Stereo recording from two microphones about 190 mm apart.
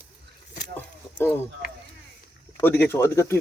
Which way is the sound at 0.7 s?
10° left (ahead or behind).